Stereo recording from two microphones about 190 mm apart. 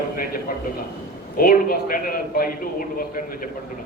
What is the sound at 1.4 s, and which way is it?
A man's voice, 50° left (ahead or behind).